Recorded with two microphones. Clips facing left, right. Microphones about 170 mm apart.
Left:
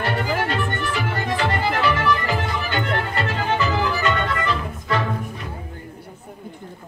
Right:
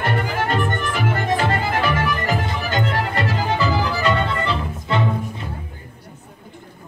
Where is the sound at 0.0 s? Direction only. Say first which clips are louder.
Right 1 dB; 50° right (ahead or behind); by 5.1 s 25° right (ahead or behind).